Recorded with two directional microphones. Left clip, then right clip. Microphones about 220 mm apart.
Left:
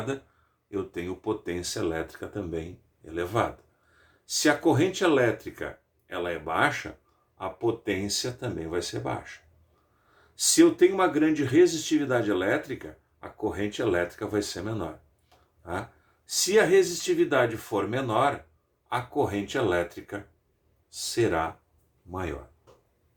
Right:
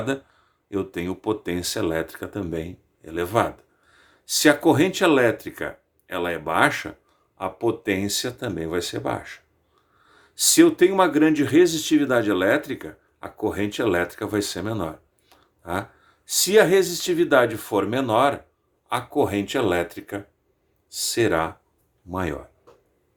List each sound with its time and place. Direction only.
0.7 s speech: 50° right (ahead or behind)
10.3 s speech: 50° right (ahead or behind)
15.3 s a sound: 50° right (ahead or behind)
16.2 s speech: 50° right (ahead or behind)